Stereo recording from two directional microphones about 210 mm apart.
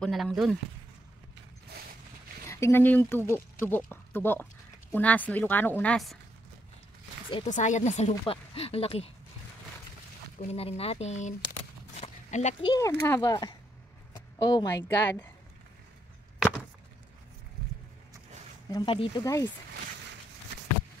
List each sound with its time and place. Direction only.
0.0 s speech: centre (ahead or behind)
2.4 s speech: 15° left (ahead or behind)
7.4 s speech: 35° left (ahead or behind)
10.5 s speech: 30° left (ahead or behind)
12.0 s a sound: 30° left (ahead or behind)
12.7 s speech: 15° left (ahead or behind)
16.3 s chop: 5° right (ahead or behind)
18.7 s speech: 20° left (ahead or behind)